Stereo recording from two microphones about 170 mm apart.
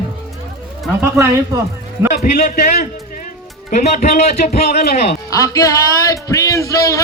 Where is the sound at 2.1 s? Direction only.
60° left (ahead or behind); by 4.7 s 40° left (ahead or behind).